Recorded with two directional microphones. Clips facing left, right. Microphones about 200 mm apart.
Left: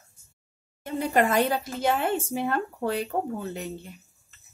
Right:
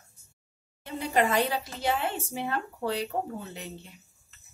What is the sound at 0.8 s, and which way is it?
Speech, 50° left (ahead or behind).